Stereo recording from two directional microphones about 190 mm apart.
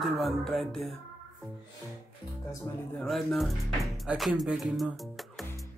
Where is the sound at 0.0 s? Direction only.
Centre (ahead or behind).